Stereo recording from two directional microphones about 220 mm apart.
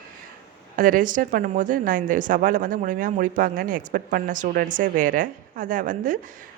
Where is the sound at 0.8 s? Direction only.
40° right (ahead or behind).